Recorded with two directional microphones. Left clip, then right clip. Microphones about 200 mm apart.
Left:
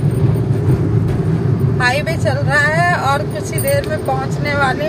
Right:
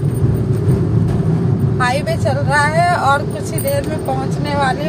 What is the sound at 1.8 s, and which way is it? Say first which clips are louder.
Vehicle: left 1 dB; 5° right (ahead or behind).